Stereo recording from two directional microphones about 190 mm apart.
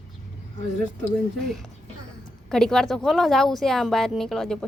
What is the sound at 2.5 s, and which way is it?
Speech, 5° left (ahead or behind).